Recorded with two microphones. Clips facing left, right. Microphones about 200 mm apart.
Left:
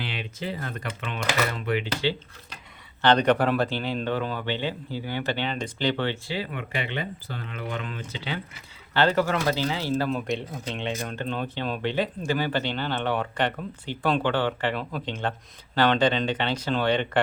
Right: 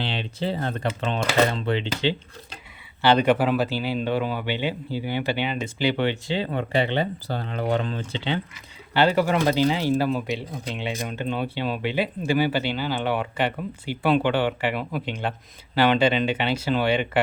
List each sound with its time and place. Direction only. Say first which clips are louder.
0.0 s speech: right 5 dB; 30° right (ahead or behind)
3.0 s speech: right 1 dB; 10° right (ahead or behind)
6.5 s speech: right 8 dB; 35° right (ahead or behind)
8.9 s speech: right 2 dB; 10° right (ahead or behind)
10.1 s speech: right 1 dB; centre (ahead or behind)